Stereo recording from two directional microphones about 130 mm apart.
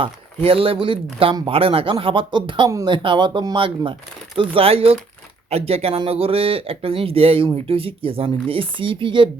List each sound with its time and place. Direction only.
0.0 s speech: 45° right (ahead or behind)